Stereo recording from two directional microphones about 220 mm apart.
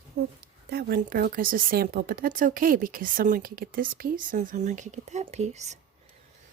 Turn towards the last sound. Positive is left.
turn(degrees=-30)  # may be behind; listen again after turning